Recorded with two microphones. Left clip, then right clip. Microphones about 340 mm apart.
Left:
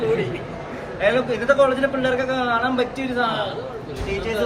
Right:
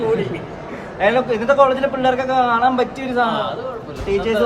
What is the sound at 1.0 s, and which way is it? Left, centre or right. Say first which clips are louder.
A man's voice: right 3 dB; right.